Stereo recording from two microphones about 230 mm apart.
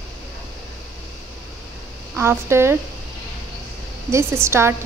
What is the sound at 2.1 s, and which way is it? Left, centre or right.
Speech, centre.